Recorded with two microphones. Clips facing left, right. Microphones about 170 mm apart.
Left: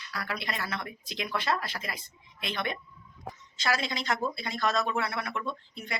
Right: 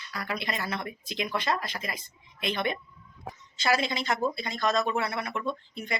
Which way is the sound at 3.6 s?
Centre (ahead or behind).